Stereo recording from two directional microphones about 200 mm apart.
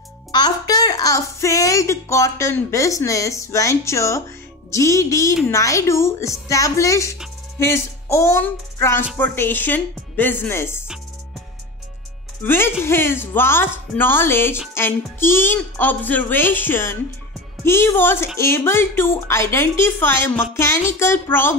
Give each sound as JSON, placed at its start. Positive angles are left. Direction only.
{"t": 0.3, "sound": "a woman's voice", "side_deg": 20}
{"t": 7.5, "sound": "child singing", "side_deg": 15}
{"t": 9.2, "sound": "a woman's voice", "side_deg": 10}
{"t": 12.4, "sound": "a woman's voice", "side_deg": 10}